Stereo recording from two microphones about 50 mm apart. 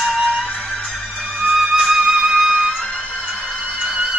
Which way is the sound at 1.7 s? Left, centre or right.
Centre.